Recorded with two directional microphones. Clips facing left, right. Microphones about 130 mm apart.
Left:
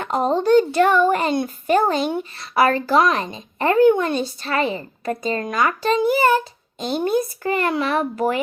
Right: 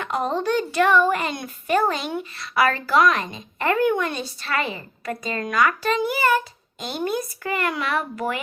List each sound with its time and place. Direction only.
0.0 s a child's voice: 35° left (ahead or behind)